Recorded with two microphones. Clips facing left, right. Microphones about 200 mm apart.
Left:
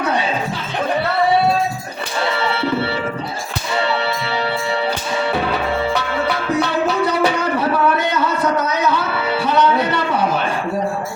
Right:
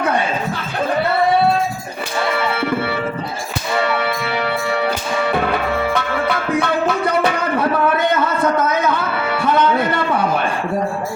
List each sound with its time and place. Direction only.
2.4 s music: 50° right (ahead or behind)